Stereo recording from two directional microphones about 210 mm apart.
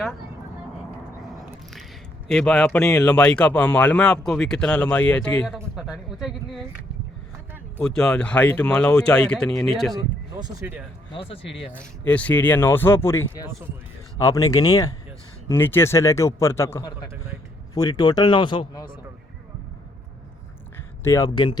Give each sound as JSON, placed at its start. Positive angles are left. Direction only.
{"t": 1.2, "sound": "a sound", "side_deg": 0}
{"t": 2.3, "sound": "speech", "side_deg": 5}
{"t": 5.5, "sound": "a sound", "side_deg": -5}
{"t": 7.8, "sound": "speech", "side_deg": 5}
{"t": 10.4, "sound": "speech", "side_deg": -15}
{"t": 11.1, "sound": "speech", "side_deg": 25}
{"t": 12.0, "sound": "a man's voice", "side_deg": 5}
{"t": 21.0, "sound": "a man's voice", "side_deg": 15}